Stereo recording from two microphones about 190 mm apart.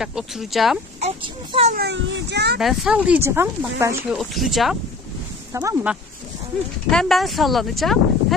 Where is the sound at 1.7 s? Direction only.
65° right (ahead or behind).